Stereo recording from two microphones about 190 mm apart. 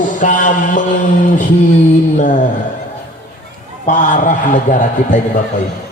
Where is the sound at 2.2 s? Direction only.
45° left (ahead or behind).